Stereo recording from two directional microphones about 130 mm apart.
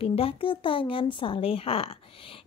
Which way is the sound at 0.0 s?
45° left (ahead or behind).